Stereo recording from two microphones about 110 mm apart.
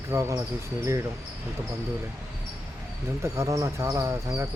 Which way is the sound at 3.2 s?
30° right (ahead or behind).